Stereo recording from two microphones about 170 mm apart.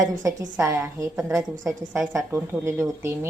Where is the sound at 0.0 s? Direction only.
20° right (ahead or behind).